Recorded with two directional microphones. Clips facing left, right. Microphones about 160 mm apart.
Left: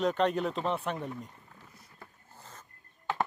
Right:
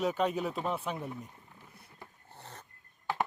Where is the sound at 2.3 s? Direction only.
65° right (ahead or behind).